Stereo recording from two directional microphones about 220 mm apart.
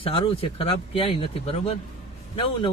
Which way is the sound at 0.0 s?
25° left (ahead or behind).